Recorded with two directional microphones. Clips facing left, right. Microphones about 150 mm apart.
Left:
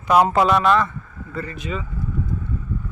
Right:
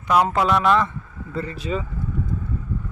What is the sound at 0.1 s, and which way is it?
Speech, 10° left (ahead or behind).